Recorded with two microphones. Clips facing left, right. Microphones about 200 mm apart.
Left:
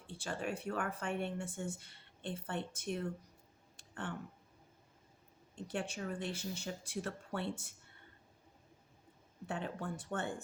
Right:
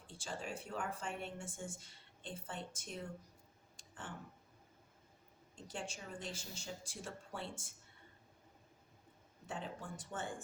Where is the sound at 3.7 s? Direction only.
60° left (ahead or behind).